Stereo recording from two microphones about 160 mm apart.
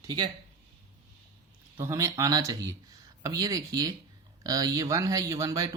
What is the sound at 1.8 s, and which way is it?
Speech, 15° right (ahead or behind).